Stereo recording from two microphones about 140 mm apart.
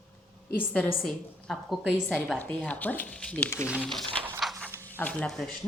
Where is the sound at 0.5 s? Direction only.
10° left (ahead or behind).